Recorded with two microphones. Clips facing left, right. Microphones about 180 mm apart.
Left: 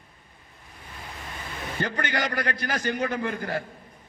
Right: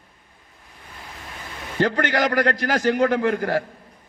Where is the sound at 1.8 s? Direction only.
90° right.